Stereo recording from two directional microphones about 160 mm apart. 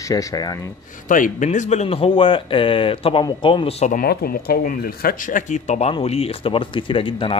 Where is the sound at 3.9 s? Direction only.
65° left (ahead or behind).